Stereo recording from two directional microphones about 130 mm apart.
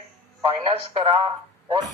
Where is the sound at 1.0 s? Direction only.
45° right (ahead or behind).